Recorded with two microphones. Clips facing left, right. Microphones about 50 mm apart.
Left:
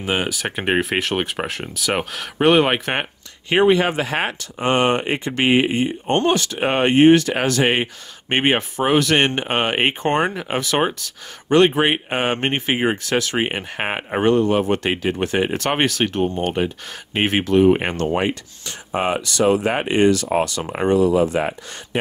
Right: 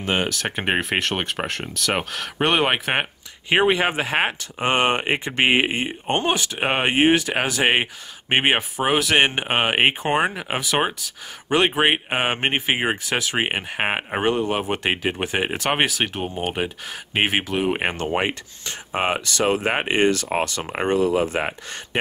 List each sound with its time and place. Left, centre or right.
0.0 s speech: centre; by 6.1 s right
6.1 s speech: centre
18.9 s speech: right